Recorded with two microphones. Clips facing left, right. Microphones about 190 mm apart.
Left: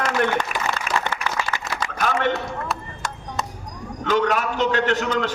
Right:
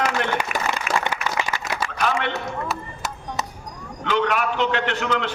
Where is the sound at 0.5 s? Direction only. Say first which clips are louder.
Right 1 dB; 40° left (ahead or behind).